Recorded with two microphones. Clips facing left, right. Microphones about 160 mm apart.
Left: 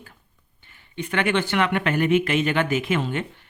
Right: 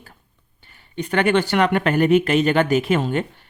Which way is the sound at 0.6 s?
40° right (ahead or behind).